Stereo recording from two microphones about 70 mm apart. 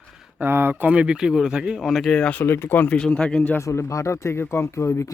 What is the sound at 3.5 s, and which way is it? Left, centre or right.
Speech, left.